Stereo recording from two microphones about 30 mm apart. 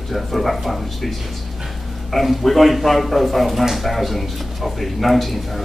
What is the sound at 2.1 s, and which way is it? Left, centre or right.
Speech, centre.